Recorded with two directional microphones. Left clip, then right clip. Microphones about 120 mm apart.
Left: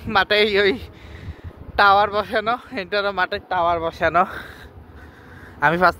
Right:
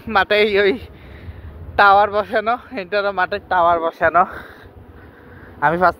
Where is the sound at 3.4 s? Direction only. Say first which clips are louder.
Right 7 dB; 10° right (ahead or behind).